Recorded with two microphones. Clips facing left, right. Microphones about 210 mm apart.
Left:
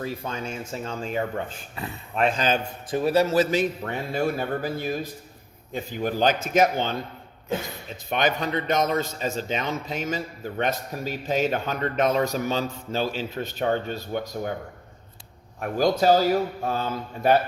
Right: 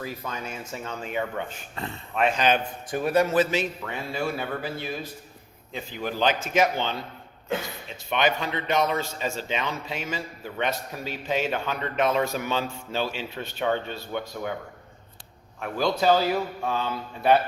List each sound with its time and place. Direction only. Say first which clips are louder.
0.0 s speech: left 3 dB; 30° left (ahead or behind)
1.7 s speech: right 2 dB; 10° left (ahead or behind)
2.4 s a man's voice: right 1 dB; 30° left (ahead or behind)
3.4 s a man's voice: left 3 dB; 50° left (ahead or behind)
8.1 s a man's voice: left 1 dB; 40° left (ahead or behind)
15.6 s a man's voice: left 3 dB; 45° left (ahead or behind)